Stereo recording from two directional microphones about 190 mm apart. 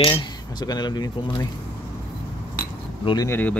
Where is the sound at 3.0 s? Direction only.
20° left (ahead or behind).